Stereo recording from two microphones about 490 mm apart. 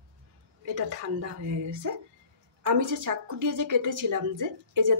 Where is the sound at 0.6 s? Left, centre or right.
Right.